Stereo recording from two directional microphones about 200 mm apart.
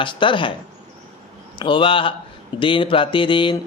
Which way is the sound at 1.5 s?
25° left (ahead or behind).